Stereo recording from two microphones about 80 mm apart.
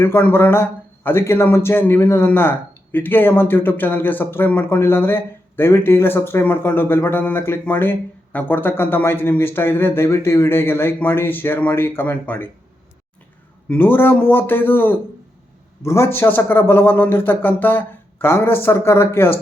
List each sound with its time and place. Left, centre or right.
0.0 s speech: left
13.7 s speech: left